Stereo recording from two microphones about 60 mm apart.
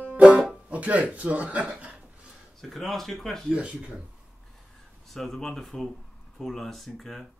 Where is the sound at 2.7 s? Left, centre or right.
Centre.